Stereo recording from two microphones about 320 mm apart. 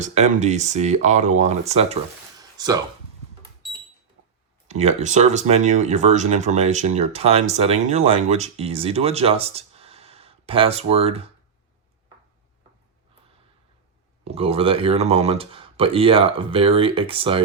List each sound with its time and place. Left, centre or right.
0.0 s speech: right
2.4 s a sound: centre
4.7 s speech: centre
14.3 s speech: centre